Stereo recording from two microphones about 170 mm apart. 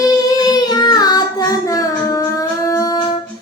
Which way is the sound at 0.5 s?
25° left (ahead or behind).